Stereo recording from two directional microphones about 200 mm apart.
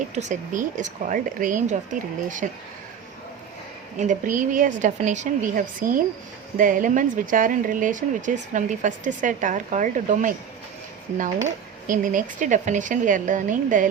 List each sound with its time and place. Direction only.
0.1 s speech: 35° right (ahead or behind)
3.9 s speech: 40° right (ahead or behind)
11.9 s speech: 40° right (ahead or behind)